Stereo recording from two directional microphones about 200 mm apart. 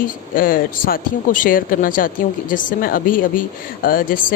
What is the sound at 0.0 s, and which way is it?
Speech, 45° left (ahead or behind).